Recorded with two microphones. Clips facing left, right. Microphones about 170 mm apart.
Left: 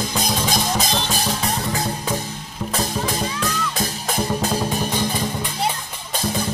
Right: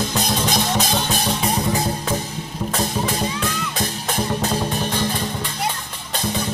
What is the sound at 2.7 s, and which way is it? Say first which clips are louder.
Music: even; centre (ahead or behind).